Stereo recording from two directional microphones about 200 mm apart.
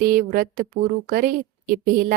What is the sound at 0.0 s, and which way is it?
Speech, 45° right (ahead or behind).